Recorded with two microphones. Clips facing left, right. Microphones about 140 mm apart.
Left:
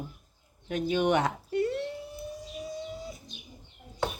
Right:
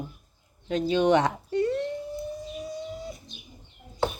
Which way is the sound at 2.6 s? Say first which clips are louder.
Right 2 dB; centre (ahead or behind).